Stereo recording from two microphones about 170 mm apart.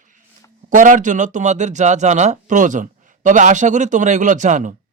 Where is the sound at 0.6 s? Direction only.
50° right (ahead or behind).